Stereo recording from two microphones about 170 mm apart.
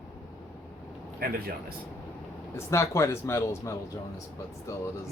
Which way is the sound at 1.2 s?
65° right (ahead or behind).